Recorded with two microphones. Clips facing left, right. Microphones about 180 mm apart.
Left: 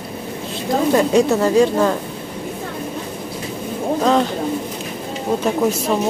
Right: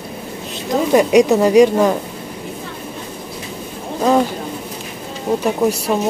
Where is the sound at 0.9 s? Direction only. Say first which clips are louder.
Right 5 dB; 15° right (ahead or behind).